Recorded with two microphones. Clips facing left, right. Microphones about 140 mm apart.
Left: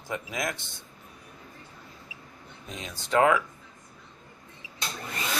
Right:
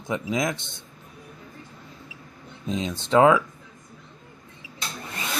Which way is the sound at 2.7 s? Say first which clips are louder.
Right 6 dB; 20° right (ahead or behind).